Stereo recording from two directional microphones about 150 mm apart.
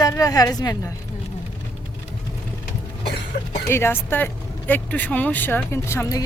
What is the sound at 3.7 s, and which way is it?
Speech, 15° left (ahead or behind).